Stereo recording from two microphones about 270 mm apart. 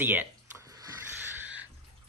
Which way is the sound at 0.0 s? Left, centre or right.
Centre.